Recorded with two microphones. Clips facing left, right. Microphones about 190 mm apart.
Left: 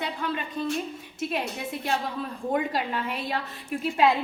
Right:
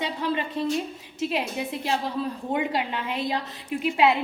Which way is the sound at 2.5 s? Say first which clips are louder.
Even; 25° right (ahead or behind).